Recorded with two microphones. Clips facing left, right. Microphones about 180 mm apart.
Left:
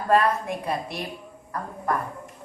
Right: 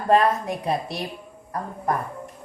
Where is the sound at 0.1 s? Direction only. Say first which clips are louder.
Right 2 dB; 20° right (ahead or behind).